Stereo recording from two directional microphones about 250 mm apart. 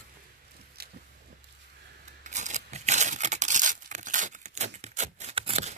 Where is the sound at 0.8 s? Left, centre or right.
Right.